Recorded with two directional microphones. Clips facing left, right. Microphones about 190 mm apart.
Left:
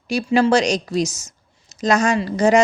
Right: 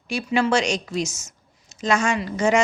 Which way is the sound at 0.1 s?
35° left (ahead or behind).